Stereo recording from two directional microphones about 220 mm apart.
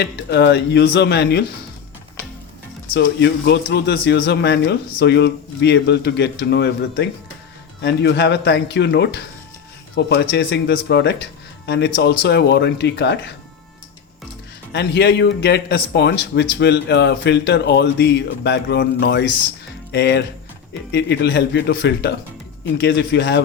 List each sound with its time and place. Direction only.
0.0 s speech: 50° left (ahead or behind)
2.9 s speech: 50° left (ahead or behind)
14.7 s speech: 50° left (ahead or behind)